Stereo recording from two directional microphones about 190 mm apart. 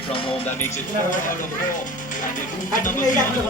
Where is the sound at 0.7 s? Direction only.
45° left (ahead or behind).